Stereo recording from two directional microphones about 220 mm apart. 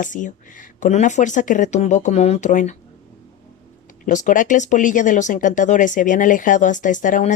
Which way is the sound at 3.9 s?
35° left (ahead or behind).